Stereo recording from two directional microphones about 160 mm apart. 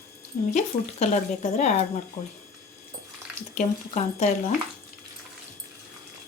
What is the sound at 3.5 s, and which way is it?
Speech, 45° left (ahead or behind).